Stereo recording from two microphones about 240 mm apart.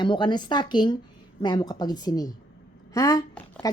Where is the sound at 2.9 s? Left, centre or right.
Centre.